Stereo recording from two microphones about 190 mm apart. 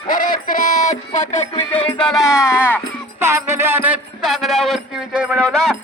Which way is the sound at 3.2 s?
15° right (ahead or behind).